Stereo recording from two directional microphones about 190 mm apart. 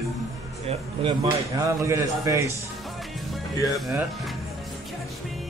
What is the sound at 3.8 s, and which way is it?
Speech, centre (ahead or behind).